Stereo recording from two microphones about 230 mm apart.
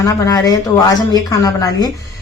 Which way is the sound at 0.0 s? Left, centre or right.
Centre.